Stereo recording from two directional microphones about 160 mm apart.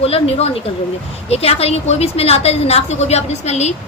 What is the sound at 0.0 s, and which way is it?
A woman's voice, 40° left (ahead or behind).